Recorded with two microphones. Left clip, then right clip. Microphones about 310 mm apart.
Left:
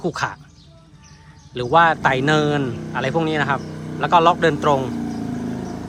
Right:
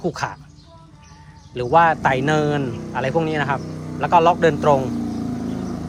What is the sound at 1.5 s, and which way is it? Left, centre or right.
Speech, centre.